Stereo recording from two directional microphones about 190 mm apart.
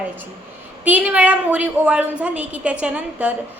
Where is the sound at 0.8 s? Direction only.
5° right (ahead or behind).